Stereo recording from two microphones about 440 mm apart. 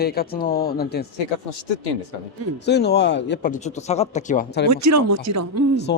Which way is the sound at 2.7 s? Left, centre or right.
Left.